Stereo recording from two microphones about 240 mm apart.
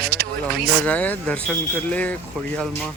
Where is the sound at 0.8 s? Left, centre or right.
Centre.